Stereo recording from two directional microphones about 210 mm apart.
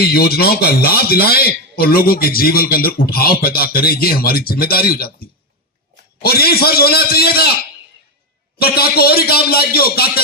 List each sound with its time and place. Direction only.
0.0 s speech: 45° left (ahead or behind)
8.6 s speech: 45° left (ahead or behind)